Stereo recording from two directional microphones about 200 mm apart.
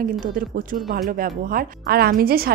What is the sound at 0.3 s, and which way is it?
A woman's voice, 45° right (ahead or behind).